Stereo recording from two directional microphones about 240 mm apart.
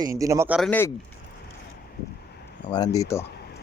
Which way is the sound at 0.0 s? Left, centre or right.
Centre.